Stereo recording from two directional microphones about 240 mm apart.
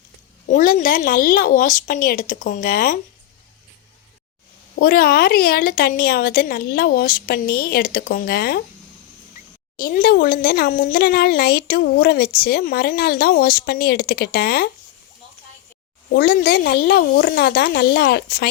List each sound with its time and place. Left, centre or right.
0.4 s speech: left
4.8 s speech: left
9.7 s speech: left
16.1 s speech: left